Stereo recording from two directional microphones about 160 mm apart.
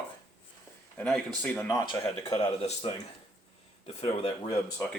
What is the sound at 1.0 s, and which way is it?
Speech, 5° left (ahead or behind).